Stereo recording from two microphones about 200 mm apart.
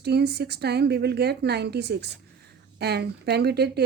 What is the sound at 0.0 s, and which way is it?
Speech, 55° right (ahead or behind).